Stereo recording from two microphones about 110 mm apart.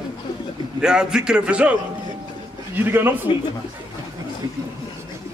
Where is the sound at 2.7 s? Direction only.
20° right (ahead or behind).